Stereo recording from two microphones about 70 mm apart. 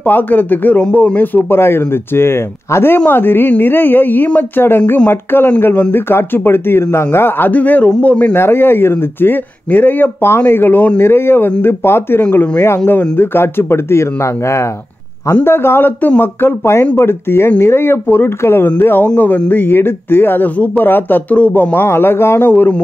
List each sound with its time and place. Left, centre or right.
0.0 s a man's voice: left
8.4 s a man's voice: left
22.5 s speech: left